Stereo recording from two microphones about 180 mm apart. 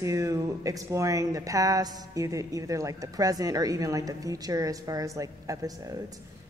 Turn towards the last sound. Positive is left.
turn(degrees=-20)  # may be behind; listen again after turning